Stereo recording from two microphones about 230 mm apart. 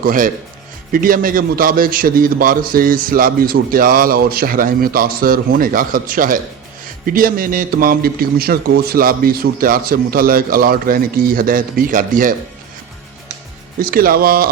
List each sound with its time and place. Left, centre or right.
0.0 s a man's voice: right
13.7 s a man's voice: right